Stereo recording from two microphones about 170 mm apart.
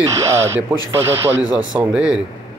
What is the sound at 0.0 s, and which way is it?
Speech, 15° right (ahead or behind).